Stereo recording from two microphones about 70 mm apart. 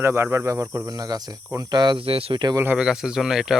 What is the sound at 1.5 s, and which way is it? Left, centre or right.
Cricket, right.